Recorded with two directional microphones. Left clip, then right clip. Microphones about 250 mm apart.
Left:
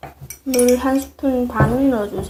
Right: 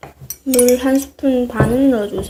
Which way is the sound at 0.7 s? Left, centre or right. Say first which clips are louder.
Right 2 dB; centre.